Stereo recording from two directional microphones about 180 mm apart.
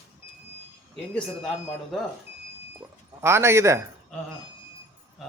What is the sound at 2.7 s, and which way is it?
Sheep, 15° right (ahead or behind).